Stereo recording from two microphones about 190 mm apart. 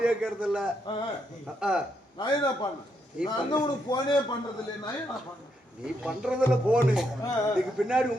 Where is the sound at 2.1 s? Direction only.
20° left (ahead or behind).